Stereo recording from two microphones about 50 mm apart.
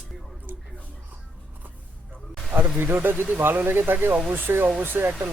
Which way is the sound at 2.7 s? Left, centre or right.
Right.